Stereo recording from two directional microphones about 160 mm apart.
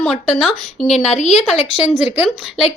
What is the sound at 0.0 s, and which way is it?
Speech, centre (ahead or behind).